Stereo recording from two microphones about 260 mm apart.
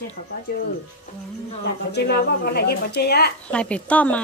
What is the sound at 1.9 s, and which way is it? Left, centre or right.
Speech, left.